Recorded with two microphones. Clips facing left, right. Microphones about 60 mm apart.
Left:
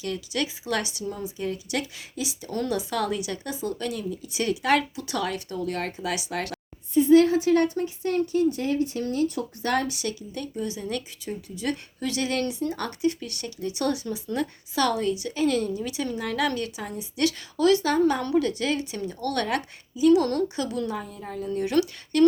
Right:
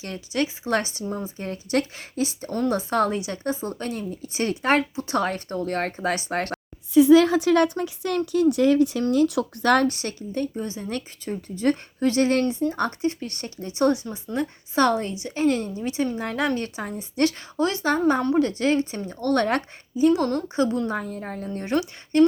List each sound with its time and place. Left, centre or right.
0.0 s speech: right
6.9 s a woman's voice: right
20.9 s speech: right